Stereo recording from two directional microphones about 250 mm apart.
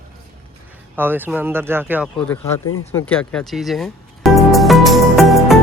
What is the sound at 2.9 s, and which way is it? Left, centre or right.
Music, centre.